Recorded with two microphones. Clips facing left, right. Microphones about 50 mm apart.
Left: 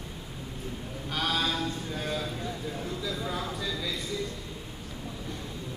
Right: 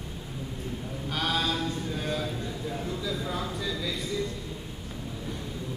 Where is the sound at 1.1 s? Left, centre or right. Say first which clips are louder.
Right 1 dB; centre.